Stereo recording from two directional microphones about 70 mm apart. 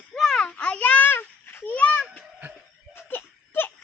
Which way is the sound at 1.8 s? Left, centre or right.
Centre.